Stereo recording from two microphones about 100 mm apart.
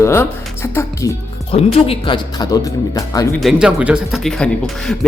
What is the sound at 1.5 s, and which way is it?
Speech, 75° left (ahead or behind).